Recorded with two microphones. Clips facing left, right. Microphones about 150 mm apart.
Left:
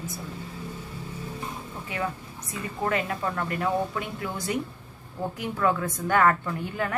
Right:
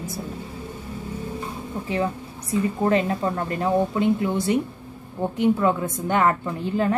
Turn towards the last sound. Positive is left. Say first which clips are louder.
# right 7 dB
turn(degrees=-30)  # may be behind; listen again after turning